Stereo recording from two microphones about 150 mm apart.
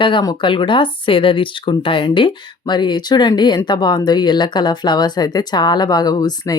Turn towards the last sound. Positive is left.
turn(degrees=25)  # may be behind; listen again after turning